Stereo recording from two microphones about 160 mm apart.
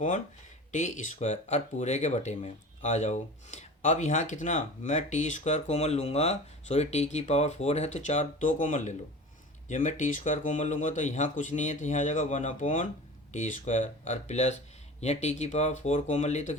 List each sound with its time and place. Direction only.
0.7 s speech: 50° left (ahead or behind)